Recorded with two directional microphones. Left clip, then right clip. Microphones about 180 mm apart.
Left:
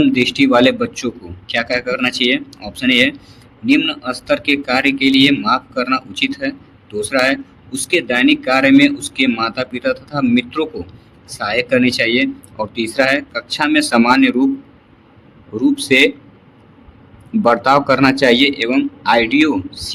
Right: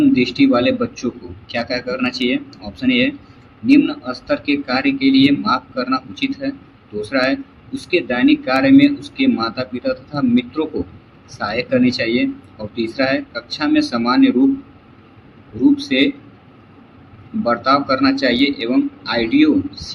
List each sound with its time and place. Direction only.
0.1 s a man's voice: 55° left (ahead or behind)
15.6 s a man's voice: 50° left (ahead or behind)
17.4 s a man's voice: 50° left (ahead or behind)